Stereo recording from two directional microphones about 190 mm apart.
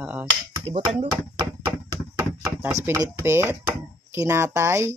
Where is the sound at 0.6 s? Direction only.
30° right (ahead or behind).